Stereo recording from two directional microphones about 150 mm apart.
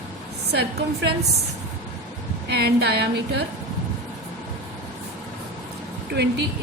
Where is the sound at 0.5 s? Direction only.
90° right.